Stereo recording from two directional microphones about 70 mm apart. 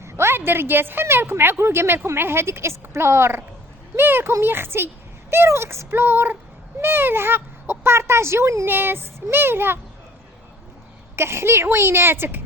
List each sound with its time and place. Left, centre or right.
0.0 s a woman's voice: right
11.2 s speech: right